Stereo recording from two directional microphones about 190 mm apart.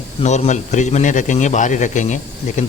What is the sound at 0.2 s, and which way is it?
A man's voice, 35° left (ahead or behind).